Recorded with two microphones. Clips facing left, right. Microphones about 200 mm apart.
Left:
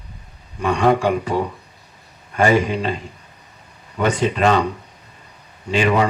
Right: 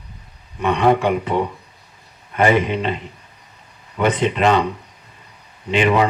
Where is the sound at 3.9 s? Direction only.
40° left (ahead or behind).